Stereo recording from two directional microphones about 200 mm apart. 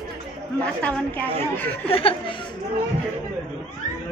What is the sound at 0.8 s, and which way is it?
Speech, 5° left (ahead or behind).